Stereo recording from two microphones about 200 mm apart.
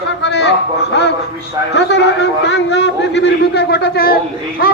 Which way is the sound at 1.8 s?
60° left (ahead or behind).